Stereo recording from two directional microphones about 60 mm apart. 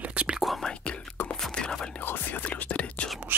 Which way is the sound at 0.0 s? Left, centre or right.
Right.